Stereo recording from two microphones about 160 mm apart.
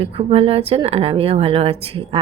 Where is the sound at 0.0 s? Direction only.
35° right (ahead or behind).